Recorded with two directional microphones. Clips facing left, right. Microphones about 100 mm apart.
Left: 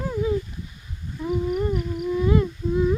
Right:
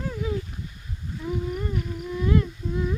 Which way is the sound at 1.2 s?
15° left (ahead or behind).